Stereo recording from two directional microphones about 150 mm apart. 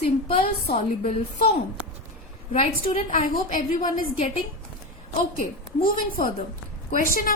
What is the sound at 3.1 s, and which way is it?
A woman's voice, 60° left (ahead or behind).